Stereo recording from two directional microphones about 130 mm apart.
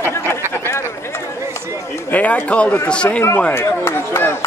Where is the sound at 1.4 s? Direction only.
20° right (ahead or behind).